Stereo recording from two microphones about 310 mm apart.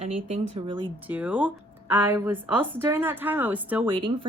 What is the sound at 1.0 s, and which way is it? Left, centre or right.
Speech, centre.